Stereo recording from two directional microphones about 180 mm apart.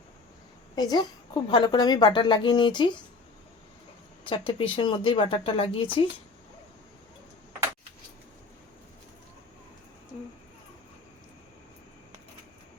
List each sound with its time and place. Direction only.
0.8 s a woman's voice: 25° left (ahead or behind)
4.3 s a woman's voice: 30° left (ahead or behind)